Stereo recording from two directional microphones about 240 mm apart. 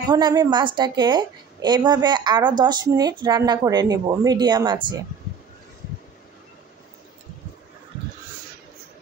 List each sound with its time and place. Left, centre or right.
0.1 s a woman's voice: centre